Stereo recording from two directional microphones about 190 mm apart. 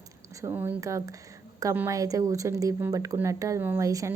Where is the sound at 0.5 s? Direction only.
15° right (ahead or behind).